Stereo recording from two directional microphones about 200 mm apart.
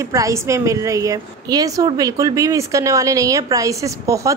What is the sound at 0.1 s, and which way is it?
A woman's voice, 15° right (ahead or behind).